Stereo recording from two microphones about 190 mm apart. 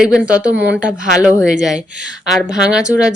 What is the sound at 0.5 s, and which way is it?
Speech, 60° right (ahead or behind).